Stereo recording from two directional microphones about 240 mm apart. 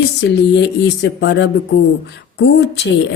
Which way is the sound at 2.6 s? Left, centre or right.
Left.